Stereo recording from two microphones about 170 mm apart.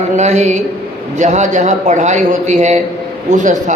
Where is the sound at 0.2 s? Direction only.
45° right (ahead or behind).